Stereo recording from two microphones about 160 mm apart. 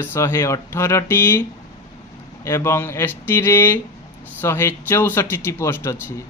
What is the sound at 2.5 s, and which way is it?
Speech, 15° left (ahead or behind).